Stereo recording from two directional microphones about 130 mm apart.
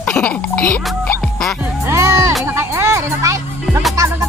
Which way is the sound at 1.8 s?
20° right (ahead or behind).